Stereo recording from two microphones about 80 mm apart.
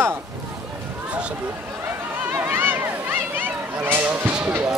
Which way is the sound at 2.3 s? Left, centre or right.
Right.